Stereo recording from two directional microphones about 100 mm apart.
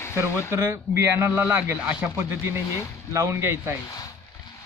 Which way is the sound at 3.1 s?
30° right (ahead or behind).